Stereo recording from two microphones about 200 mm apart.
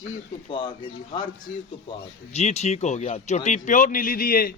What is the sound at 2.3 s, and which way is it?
A man's voice, 35° left (ahead or behind).